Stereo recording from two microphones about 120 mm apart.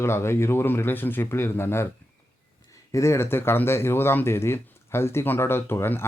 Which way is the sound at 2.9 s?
25° left (ahead or behind).